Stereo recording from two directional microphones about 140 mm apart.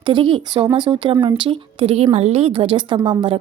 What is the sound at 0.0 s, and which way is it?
A woman's voice, 35° right (ahead or behind).